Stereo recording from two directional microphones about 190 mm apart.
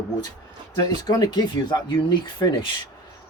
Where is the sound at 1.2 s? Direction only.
20° left (ahead or behind).